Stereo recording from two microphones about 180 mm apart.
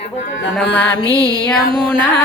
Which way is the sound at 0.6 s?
5° left (ahead or behind).